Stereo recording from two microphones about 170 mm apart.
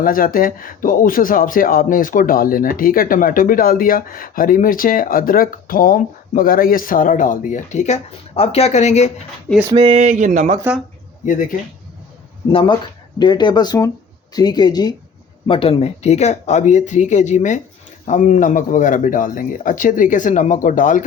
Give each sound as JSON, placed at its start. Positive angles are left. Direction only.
{"t": 0.0, "sound": "speech", "side_deg": 55}
{"t": 9.7, "sound": "a sound", "side_deg": -35}
{"t": 12.5, "sound": "speech", "side_deg": 30}